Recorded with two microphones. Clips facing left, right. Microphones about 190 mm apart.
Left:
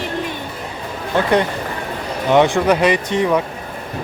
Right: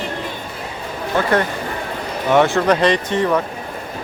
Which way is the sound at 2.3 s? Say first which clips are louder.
Left 1 dB; 15° left (ahead or behind).